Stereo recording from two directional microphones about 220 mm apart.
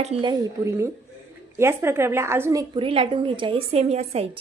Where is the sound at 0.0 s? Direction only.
25° right (ahead or behind).